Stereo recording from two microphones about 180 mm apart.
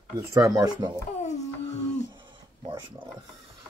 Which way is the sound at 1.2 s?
40° left (ahead or behind).